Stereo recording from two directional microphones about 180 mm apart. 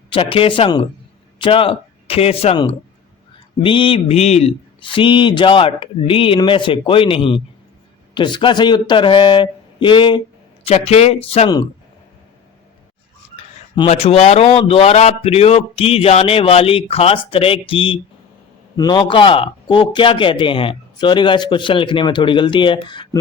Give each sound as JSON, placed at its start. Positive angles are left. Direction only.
{"t": 0.1, "sound": "a man's voice", "side_deg": 30}
{"t": 13.3, "sound": "a man's voice", "side_deg": 30}